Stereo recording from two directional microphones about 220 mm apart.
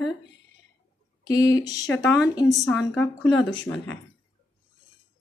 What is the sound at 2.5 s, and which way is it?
A woman's voice, centre (ahead or behind).